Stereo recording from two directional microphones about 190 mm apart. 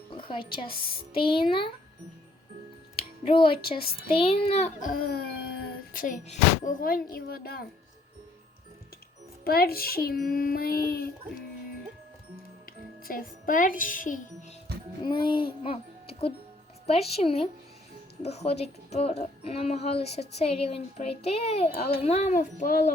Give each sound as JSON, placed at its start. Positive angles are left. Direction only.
{"t": 0.1, "sound": "a woman's voice", "side_deg": 25}
{"t": 2.9, "sound": "music", "side_deg": 25}
{"t": 3.8, "sound": "a child's voice", "side_deg": 30}
{"t": 9.4, "sound": "a child's voice", "side_deg": 55}
{"t": 13.1, "sound": "a child's voice", "side_deg": 50}
{"t": 15.0, "sound": "music", "side_deg": 25}
{"t": 16.8, "sound": "a child's voice", "side_deg": 35}